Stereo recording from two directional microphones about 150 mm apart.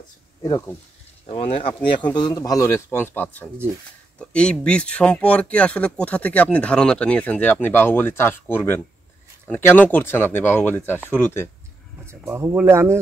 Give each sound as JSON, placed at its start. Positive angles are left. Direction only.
{"t": 0.4, "sound": "a man's voice", "side_deg": 20}
{"t": 1.2, "sound": "a man's voice", "side_deg": 40}
{"t": 12.3, "sound": "speech", "side_deg": -15}